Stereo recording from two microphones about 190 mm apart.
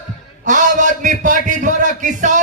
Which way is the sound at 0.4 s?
40° right (ahead or behind).